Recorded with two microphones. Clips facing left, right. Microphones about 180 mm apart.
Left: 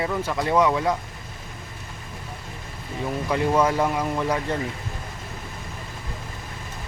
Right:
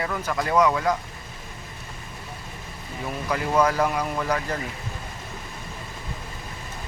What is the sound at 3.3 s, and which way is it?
Speech, 25° left (ahead or behind).